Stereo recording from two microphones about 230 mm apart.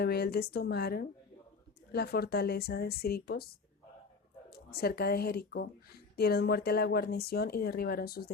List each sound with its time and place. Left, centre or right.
0.0 s speech: left